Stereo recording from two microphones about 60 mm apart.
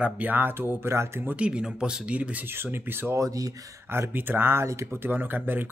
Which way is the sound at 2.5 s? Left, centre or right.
Right.